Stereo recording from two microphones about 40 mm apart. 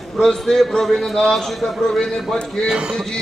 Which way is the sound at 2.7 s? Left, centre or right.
Right.